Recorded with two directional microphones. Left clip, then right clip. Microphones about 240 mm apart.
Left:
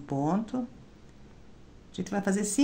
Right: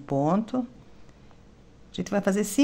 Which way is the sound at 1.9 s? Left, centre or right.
Right.